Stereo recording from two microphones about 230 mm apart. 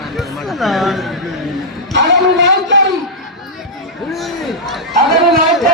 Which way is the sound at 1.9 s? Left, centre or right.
Right.